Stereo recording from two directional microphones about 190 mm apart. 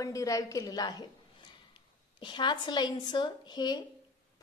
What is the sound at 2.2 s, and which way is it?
A woman's voice, 25° left (ahead or behind).